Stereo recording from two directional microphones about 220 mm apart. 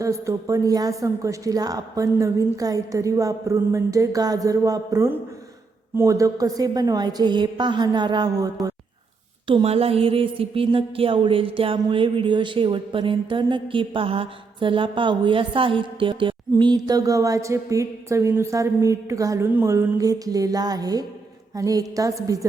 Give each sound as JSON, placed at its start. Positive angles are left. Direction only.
{"t": 0.0, "sound": "a woman's voice", "side_deg": -15}
{"t": 9.5, "sound": "a sound", "side_deg": -25}
{"t": 21.5, "sound": "a woman's voice", "side_deg": -15}